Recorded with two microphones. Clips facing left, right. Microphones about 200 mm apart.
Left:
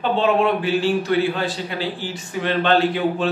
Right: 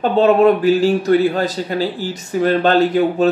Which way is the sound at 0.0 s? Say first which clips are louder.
Right 7 dB; 45° right (ahead or behind).